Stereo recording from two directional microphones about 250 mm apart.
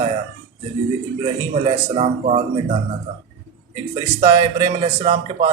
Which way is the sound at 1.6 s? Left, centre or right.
Right.